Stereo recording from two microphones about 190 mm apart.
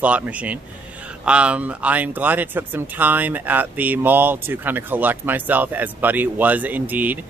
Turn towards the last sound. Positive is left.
turn(degrees=-10)  # may be behind; listen again after turning